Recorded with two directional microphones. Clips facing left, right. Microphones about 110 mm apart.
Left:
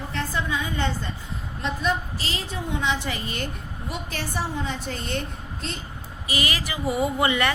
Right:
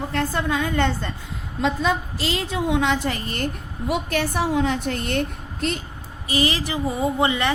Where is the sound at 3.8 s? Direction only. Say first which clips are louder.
Right 9 dB; 80° right; by 5.8 s 65° right (ahead or behind).